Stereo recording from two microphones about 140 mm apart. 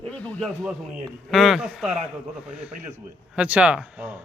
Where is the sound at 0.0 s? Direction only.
10° left (ahead or behind).